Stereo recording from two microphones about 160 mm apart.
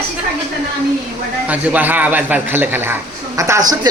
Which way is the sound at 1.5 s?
10° right (ahead or behind).